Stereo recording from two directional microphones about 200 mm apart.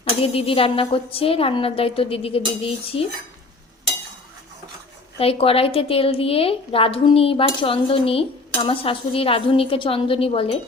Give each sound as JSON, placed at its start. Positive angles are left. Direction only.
{"t": 0.0, "sound": "speech", "side_deg": 30}
{"t": 5.2, "sound": "speech", "side_deg": 30}